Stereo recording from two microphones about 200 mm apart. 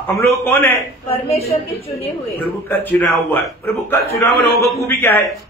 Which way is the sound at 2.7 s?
10° left (ahead or behind).